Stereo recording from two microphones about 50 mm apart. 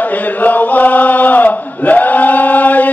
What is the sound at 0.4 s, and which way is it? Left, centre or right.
Chant, left.